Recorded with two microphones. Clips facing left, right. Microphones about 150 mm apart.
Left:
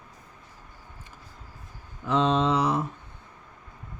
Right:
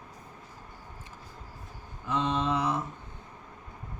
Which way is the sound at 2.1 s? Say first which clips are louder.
Left 6 dB; 90° left.